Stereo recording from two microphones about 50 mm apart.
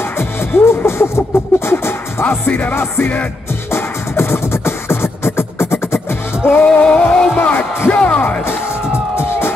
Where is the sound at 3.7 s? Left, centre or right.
Left.